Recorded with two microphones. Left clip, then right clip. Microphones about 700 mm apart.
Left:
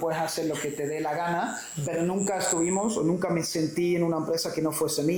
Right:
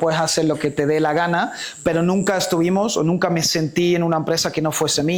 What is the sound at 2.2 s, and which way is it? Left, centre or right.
Speech, right.